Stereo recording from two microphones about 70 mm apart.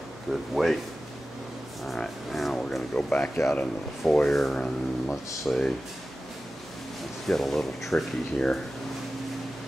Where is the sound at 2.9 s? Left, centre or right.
Centre.